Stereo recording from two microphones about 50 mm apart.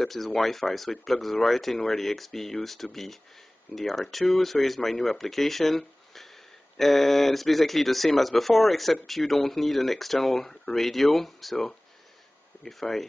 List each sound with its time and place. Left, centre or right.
0.0 s speech: centre